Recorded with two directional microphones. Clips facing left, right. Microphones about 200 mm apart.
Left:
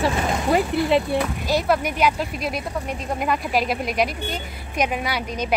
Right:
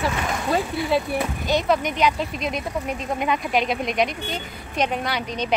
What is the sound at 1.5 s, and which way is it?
A woman's voice, 5° left (ahead or behind).